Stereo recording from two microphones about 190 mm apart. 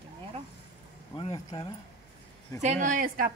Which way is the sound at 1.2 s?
25° left (ahead or behind).